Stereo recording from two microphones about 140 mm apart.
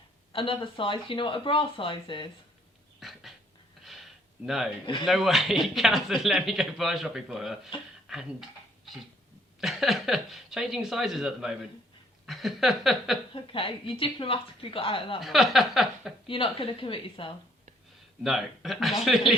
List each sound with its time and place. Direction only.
0.3 s speech: 35° left (ahead or behind)
3.0 s a sound: centre (ahead or behind)
4.4 s speech: centre (ahead or behind)
8.0 s dishes: 5° right (ahead or behind)
9.6 s speech: centre (ahead or behind)
12.2 s a sound: centre (ahead or behind)
13.3 s speech: 40° left (ahead or behind)
15.2 s speech: centre (ahead or behind)
16.2 s speech: 40° left (ahead or behind)
18.2 s speech: centre (ahead or behind)